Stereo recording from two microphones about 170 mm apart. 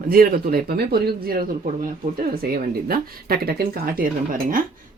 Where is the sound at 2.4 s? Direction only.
60° right (ahead or behind).